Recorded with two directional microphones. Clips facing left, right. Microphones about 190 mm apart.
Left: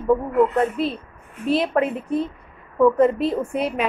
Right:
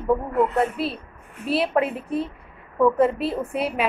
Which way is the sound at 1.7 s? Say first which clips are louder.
Left 2 dB; 10° right (ahead or behind).